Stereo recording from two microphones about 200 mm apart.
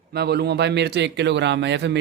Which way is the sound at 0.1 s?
55° right (ahead or behind).